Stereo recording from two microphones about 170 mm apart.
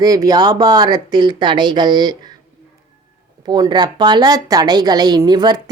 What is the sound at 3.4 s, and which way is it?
Speech, 25° right (ahead or behind).